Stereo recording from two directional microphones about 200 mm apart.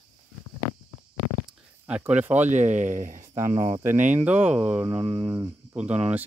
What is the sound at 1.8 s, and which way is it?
Speech, 5° right (ahead or behind).